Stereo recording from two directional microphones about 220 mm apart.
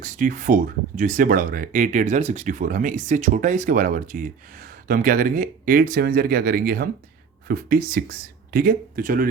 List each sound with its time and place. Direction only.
0.0 s speech: 35° right (ahead or behind)